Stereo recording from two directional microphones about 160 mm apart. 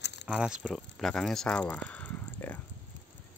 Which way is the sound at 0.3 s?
5° right (ahead or behind).